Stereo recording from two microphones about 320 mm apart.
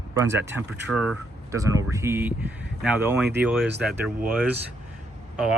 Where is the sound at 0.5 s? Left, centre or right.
Centre.